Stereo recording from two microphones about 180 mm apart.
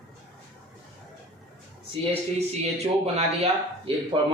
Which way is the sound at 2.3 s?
35° right (ahead or behind).